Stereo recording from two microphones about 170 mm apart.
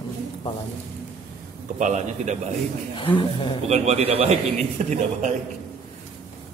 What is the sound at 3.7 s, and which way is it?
A man's voice, 40° right (ahead or behind).